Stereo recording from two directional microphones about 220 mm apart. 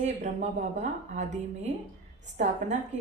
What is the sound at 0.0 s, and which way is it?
A woman's voice, 30° right (ahead or behind).